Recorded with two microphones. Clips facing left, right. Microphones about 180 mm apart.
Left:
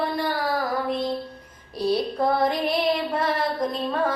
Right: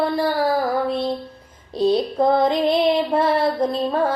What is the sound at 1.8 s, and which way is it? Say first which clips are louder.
Child singing: right 5 dB; 20° right (ahead or behind).